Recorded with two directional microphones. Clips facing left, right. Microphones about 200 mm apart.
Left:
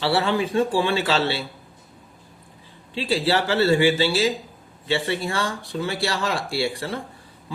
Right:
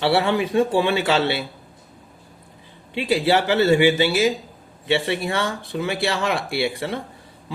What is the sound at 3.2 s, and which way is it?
Speech, 20° right (ahead or behind).